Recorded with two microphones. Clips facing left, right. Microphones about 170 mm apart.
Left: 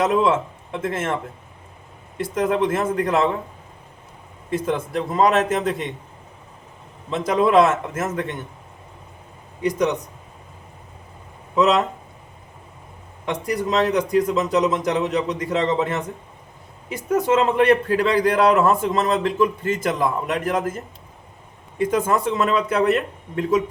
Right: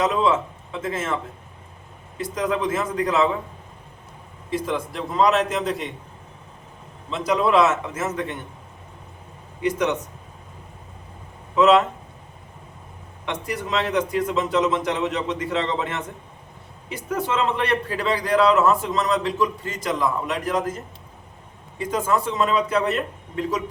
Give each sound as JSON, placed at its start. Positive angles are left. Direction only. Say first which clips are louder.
{"t": 0.1, "sound": "speech", "louder": "left 2 dB", "side_deg": 55}
{"t": 2.1, "sound": "a man's voice", "louder": "left 3 dB", "side_deg": 55}
{"t": 4.7, "sound": "a man's voice", "louder": "left 3 dB", "side_deg": 50}
{"t": 7.1, "sound": "a man's voice", "louder": "left 3 dB", "side_deg": 50}
{"t": 9.6, "sound": "speech", "louder": "left 2 dB", "side_deg": 40}
{"t": 13.2, "sound": "a man's voice", "louder": "left 5 dB", "side_deg": 40}
{"t": 21.8, "sound": "a man's voice", "louder": "left 3 dB", "side_deg": 50}